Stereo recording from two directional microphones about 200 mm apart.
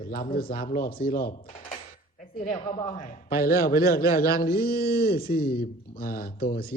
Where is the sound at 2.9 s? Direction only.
45° left (ahead or behind).